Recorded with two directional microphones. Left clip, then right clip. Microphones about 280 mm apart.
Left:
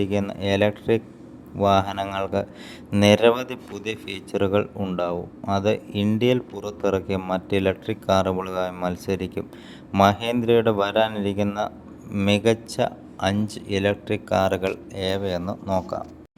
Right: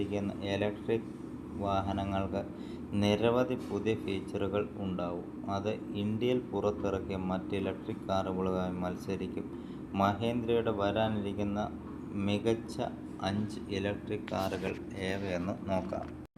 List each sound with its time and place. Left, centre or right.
0.0 s a man's voice: left